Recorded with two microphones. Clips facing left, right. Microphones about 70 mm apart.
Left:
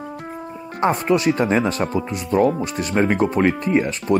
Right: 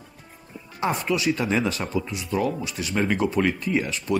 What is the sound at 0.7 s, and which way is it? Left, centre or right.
Speech, left.